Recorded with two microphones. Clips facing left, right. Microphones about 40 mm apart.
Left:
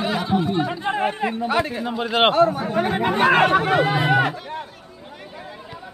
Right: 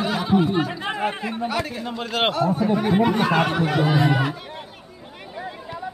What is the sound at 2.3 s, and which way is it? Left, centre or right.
Speech, left.